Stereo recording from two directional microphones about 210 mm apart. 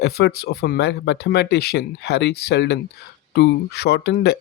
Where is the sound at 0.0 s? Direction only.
50° left (ahead or behind).